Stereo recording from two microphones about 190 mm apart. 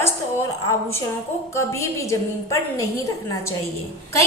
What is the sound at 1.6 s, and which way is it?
A woman's voice, 15° left (ahead or behind).